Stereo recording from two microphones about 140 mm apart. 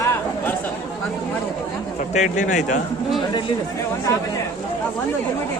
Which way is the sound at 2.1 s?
60° left (ahead or behind).